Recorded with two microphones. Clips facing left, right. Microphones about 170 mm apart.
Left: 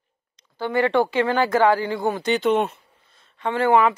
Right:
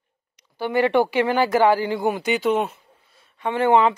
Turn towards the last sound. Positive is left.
turn(degrees=-20)  # may be behind; listen again after turning